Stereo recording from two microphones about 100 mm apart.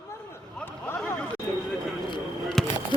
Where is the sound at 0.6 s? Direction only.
20° left (ahead or behind).